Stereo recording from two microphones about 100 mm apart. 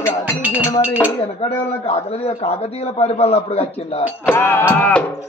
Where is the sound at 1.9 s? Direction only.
90° left.